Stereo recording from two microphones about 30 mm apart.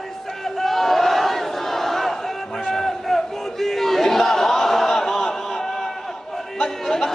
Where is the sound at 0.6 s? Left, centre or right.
Centre.